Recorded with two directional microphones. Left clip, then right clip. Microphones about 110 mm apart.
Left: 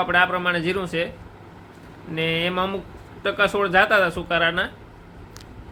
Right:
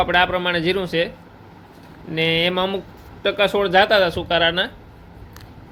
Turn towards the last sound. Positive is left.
turn(degrees=-25)  # may be behind; listen again after turning